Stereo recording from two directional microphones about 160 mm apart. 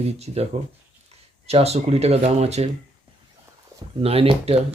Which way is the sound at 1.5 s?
40° right (ahead or behind).